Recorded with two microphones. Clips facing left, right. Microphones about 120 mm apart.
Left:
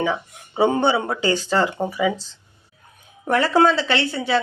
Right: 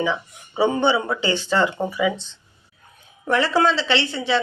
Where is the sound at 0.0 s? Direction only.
45° left (ahead or behind).